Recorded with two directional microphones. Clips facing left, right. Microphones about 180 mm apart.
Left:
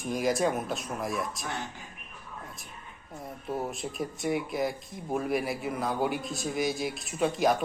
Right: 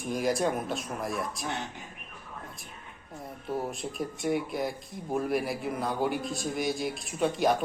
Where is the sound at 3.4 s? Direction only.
Centre (ahead or behind).